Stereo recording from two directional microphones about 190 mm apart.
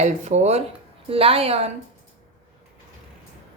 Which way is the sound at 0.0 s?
35° right (ahead or behind).